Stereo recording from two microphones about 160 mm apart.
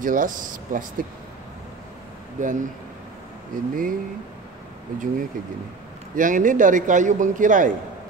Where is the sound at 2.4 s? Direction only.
50° right (ahead or behind).